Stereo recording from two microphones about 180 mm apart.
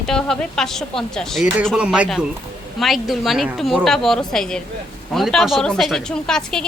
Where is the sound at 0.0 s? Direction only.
5° left (ahead or behind).